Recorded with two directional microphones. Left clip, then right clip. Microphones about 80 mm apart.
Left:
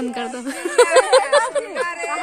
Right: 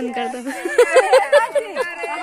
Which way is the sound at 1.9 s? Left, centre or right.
Left.